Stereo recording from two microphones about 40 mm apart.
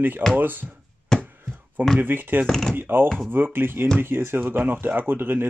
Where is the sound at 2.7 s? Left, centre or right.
Right.